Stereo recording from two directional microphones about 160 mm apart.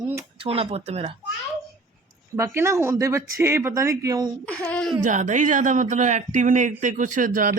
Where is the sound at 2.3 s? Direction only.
15° right (ahead or behind).